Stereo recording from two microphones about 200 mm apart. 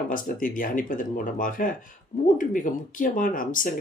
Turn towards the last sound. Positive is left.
turn(degrees=45)  # may be behind; listen again after turning